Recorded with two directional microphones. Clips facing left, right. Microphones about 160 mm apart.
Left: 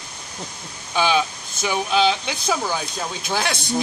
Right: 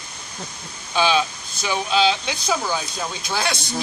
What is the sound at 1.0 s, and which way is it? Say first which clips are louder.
A man's voice: even; 15° left (ahead or behind).